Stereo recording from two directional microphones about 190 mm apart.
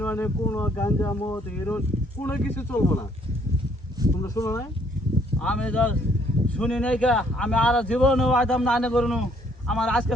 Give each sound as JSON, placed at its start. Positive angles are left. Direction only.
{"t": 0.0, "sound": "speech", "side_deg": 10}
{"t": 4.2, "sound": "speech", "side_deg": 15}
{"t": 5.4, "sound": "speech", "side_deg": 5}